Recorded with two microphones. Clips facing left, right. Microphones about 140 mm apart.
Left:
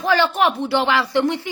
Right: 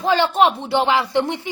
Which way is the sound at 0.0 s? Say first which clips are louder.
Right 1 dB; 20° right (ahead or behind).